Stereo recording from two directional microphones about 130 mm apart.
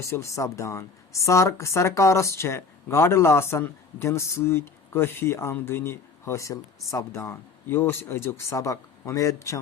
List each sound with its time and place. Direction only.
0.0 s speech: 20° left (ahead or behind)